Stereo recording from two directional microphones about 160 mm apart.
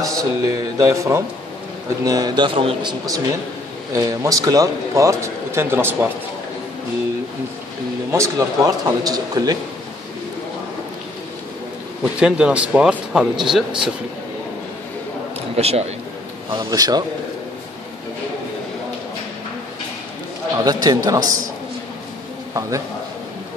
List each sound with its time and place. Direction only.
0.0 s speech: 20° right (ahead or behind)
8.1 s speech: 20° right (ahead or behind)
12.0 s speech: 5° right (ahead or behind)
15.5 s a man's voice: 40° right (ahead or behind)
16.4 s speech: 25° right (ahead or behind)
20.6 s speech: 25° right (ahead or behind)
22.5 s speech: 20° right (ahead or behind)